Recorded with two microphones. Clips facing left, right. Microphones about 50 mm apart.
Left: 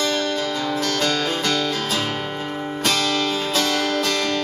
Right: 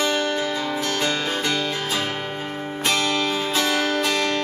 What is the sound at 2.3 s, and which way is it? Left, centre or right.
Music, centre.